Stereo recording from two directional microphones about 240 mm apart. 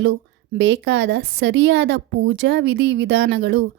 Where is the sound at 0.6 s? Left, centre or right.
Right.